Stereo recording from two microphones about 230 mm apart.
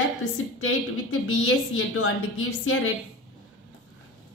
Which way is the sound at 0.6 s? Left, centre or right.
Left.